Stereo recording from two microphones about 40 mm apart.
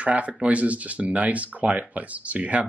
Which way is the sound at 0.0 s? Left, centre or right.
Right.